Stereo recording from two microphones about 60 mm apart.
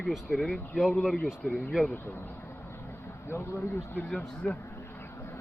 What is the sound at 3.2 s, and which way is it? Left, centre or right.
Speech, left.